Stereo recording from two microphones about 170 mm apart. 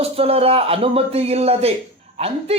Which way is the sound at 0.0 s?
35° right (ahead or behind).